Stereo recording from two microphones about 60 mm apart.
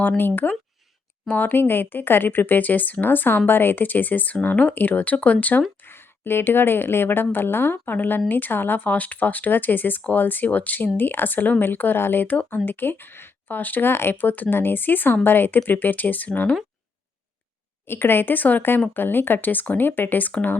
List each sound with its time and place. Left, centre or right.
0.2 s speech: left
5.8 s speech: left
17.8 s speech: left